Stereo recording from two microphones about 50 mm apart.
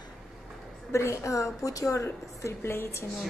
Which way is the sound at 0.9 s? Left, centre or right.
Left.